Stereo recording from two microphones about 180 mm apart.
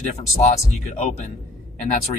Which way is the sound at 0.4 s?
40° left (ahead or behind).